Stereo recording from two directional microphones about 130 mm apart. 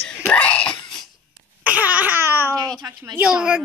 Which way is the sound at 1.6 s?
10° right (ahead or behind).